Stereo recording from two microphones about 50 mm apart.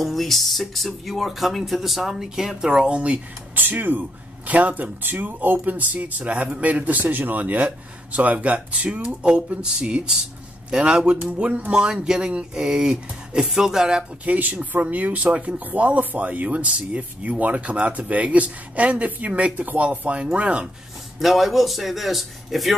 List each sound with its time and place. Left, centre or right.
0.0 s speech: centre
14.2 s speech: right
21.2 s speech: centre